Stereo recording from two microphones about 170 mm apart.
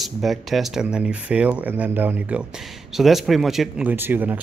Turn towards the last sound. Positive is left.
turn(degrees=-10)  # may be behind; listen again after turning